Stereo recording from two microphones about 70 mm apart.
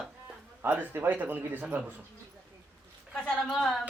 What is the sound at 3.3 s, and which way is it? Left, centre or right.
Speech, centre.